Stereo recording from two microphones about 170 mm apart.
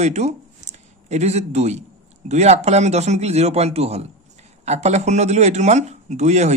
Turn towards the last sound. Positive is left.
turn(degrees=-40)  # may be behind; listen again after turning